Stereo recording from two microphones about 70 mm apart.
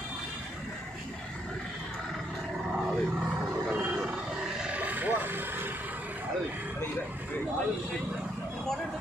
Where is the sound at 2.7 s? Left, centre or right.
Centre.